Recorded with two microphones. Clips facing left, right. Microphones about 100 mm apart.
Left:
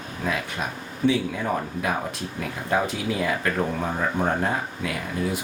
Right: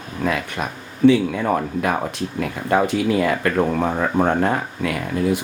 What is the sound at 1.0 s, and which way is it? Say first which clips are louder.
Speech: right 8 dB; 65° right (ahead or behind).